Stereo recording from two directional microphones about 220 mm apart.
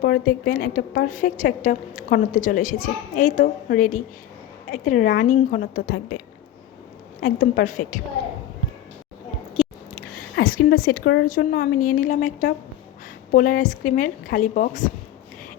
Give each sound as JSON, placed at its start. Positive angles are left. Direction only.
{"t": 0.0, "sound": "a woman's voice", "side_deg": 40}
{"t": 7.2, "sound": "a woman's voice", "side_deg": 40}
{"t": 10.3, "sound": "a woman's voice", "side_deg": 40}